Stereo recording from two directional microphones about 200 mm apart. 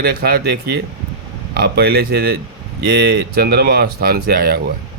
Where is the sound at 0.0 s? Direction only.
50° right (ahead or behind).